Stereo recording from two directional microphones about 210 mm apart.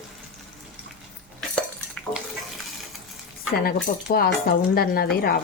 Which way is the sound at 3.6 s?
45° left (ahead or behind).